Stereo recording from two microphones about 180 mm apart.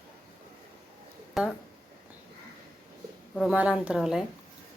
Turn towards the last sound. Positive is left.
turn(degrees=-5)  # may be behind; listen again after turning